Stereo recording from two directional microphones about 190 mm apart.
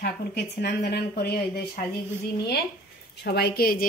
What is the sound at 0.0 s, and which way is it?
Speech, 60° left (ahead or behind).